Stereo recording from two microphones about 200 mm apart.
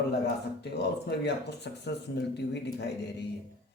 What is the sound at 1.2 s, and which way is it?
Speech, 60° left (ahead or behind).